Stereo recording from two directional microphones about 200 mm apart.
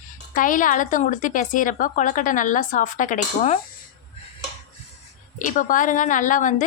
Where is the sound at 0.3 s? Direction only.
40° left (ahead or behind).